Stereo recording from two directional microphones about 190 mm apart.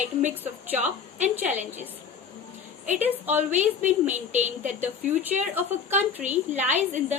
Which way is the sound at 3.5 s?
40° right (ahead or behind).